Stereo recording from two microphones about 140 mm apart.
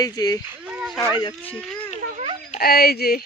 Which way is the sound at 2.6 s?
90° left.